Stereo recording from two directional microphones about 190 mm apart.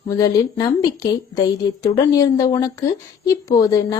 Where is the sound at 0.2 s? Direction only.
20° left (ahead or behind).